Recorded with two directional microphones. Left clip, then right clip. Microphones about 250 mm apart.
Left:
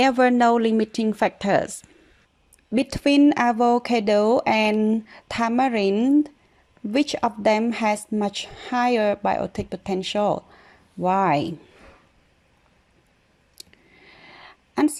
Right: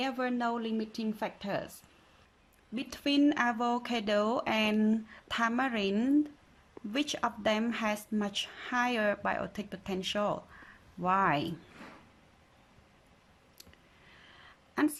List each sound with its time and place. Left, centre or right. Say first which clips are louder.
0.0 s speech: left 15 dB; left
2.7 s speech: left 12 dB; left
13.6 s a sound: left 11 dB; centre